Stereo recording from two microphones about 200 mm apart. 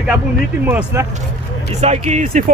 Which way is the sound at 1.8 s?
35° right (ahead or behind).